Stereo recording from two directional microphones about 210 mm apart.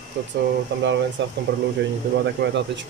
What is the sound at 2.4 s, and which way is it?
Speech, 55° right (ahead or behind).